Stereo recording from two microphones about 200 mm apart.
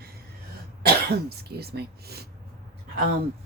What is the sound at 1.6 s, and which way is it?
Speech, 50° right (ahead or behind).